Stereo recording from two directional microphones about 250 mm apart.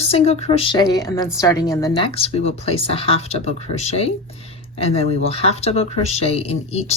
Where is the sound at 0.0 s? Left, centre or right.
Left.